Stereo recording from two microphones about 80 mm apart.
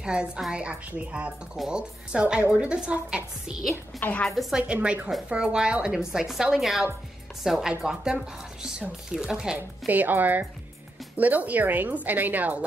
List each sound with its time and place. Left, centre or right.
0.0 s a woman's voice: centre
4.0 s a woman's voice: centre
4.3 s a woman's voice: centre
9.6 s a woman's voice: right